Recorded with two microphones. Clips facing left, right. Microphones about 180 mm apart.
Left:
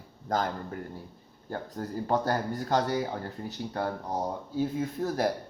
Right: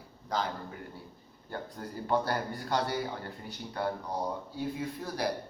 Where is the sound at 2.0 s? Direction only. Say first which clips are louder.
Left 2 dB; 40° left (ahead or behind).